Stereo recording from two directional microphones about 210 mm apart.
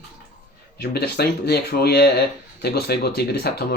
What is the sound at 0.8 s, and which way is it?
Speech, 50° left (ahead or behind).